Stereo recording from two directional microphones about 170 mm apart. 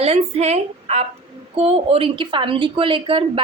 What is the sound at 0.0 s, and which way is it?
A woman's voice, 40° right (ahead or behind).